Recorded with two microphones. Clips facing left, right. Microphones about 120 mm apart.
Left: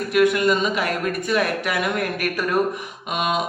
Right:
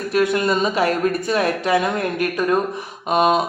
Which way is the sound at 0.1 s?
30° right (ahead or behind).